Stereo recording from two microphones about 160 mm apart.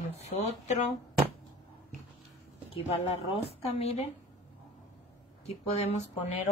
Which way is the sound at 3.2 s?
40° left (ahead or behind).